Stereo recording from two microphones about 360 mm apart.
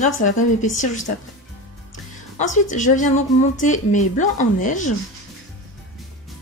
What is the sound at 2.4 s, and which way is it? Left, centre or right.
A woman's voice, left.